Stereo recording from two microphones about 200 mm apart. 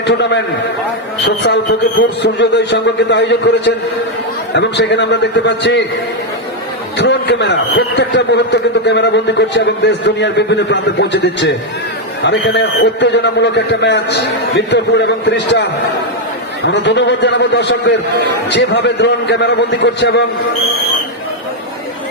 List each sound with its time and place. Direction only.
0.1 s a man's voice: 60° left (ahead or behind)
7.0 s a man's voice: 60° left (ahead or behind)
16.7 s a man's voice: 60° left (ahead or behind)